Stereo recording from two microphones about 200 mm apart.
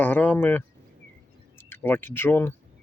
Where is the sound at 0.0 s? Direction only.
10° left (ahead or behind).